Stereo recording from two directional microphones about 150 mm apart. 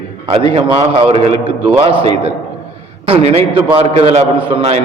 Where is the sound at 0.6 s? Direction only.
35° right (ahead or behind).